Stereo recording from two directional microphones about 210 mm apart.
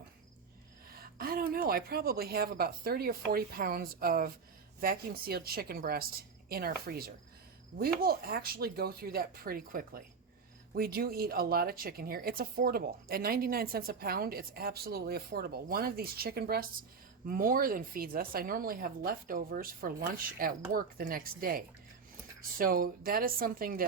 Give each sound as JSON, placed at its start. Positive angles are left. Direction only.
{"t": 1.2, "sound": "a woman's voice", "side_deg": -45}